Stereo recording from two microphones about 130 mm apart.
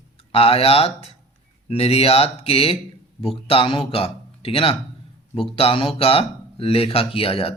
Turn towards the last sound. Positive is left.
turn(degrees=45)  # may be behind; listen again after turning